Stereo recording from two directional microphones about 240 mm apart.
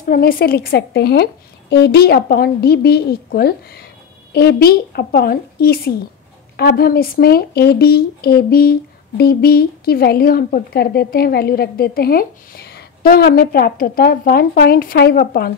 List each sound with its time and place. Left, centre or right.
0.0 s speech: left